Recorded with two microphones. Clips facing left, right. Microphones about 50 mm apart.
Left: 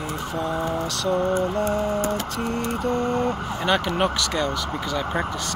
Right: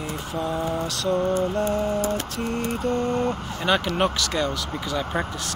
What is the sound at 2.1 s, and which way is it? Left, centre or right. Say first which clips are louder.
Speech: left 1 dB; centre.